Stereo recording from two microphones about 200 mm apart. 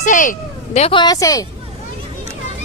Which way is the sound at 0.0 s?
40° left (ahead or behind).